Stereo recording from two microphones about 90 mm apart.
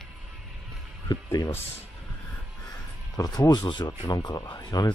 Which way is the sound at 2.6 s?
45° left (ahead or behind).